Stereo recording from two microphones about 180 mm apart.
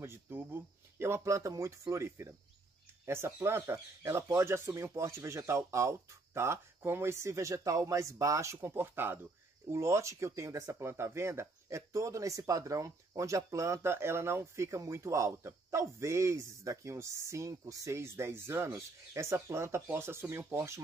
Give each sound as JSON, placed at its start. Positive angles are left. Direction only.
{"t": 0.0, "sound": "speech", "side_deg": -10}